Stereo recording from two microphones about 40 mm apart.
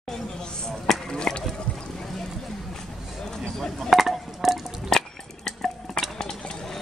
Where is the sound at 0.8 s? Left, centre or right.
Centre.